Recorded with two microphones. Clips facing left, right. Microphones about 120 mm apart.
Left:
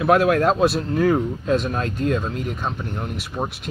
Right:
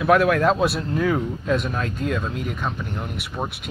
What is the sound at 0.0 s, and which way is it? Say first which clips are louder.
Speech: left 1 dB; 30° left (ahead or behind).